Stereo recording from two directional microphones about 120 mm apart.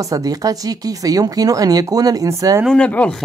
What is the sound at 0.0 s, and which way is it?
Speech, 30° right (ahead or behind).